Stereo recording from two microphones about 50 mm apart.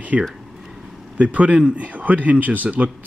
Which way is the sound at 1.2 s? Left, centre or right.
Right.